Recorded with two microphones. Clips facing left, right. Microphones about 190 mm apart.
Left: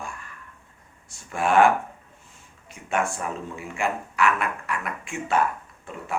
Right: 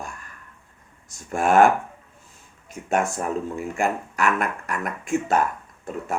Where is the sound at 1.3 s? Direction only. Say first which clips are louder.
Right 2 dB; 45° right (ahead or behind).